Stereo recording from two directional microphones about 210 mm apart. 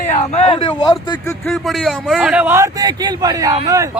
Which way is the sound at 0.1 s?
30° left (ahead or behind).